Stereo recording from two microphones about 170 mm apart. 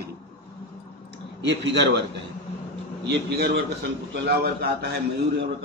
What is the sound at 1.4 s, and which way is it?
Speech, 90° right.